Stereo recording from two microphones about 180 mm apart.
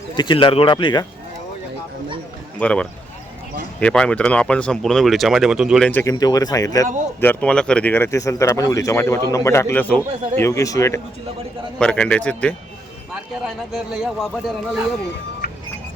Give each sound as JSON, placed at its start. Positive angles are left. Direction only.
{"t": 0.2, "sound": "speech", "side_deg": 25}
{"t": 2.6, "sound": "speech", "side_deg": 5}
{"t": 5.9, "sound": "speech", "side_deg": 15}
{"t": 11.8, "sound": "speech", "side_deg": 5}
{"t": 13.7, "sound": "speech", "side_deg": -5}